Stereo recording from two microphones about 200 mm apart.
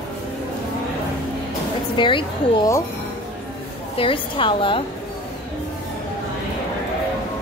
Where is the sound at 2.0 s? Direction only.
25° left (ahead or behind).